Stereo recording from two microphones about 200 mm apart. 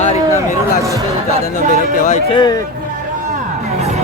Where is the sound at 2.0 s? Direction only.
35° left (ahead or behind).